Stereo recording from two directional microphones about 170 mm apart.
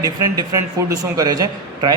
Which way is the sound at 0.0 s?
20° right (ahead or behind).